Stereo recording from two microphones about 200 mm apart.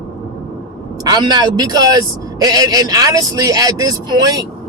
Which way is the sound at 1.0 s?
20° right (ahead or behind).